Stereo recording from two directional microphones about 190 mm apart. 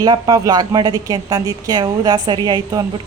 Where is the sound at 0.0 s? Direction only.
20° right (ahead or behind).